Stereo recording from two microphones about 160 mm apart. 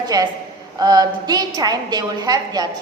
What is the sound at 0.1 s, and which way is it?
A woman's voice, 25° right (ahead or behind).